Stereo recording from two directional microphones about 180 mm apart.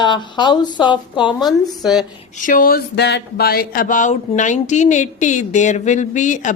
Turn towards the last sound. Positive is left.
turn(degrees=45)  # may be behind; listen again after turning